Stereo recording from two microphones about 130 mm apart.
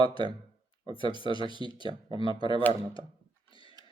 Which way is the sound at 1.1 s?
40° left (ahead or behind).